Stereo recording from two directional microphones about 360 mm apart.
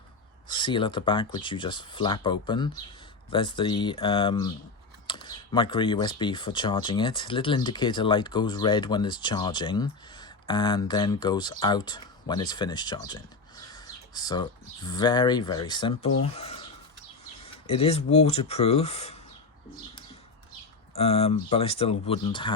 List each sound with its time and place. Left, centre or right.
0.5 s speech: centre
20.9 s speech: centre